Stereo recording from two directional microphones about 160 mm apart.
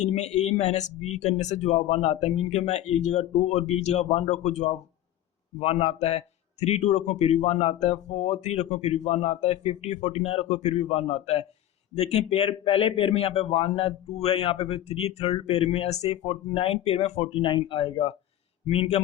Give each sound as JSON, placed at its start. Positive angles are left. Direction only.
{"t": 0.0, "sound": "a man's voice", "side_deg": 45}